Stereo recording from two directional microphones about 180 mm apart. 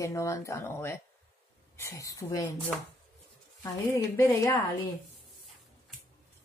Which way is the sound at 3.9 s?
15° left (ahead or behind).